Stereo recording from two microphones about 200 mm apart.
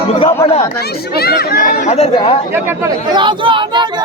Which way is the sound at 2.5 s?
20° right (ahead or behind).